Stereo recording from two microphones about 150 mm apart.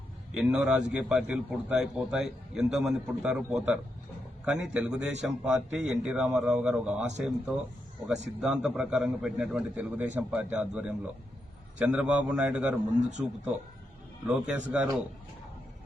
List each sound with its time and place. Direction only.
0.3 s a man's voice: 5° right (ahead or behind)
13.0 s speech: 55° right (ahead or behind)
14.3 s a man's voice: 5° right (ahead or behind)